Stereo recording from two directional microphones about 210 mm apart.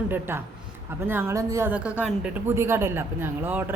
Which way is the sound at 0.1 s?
10° right (ahead or behind).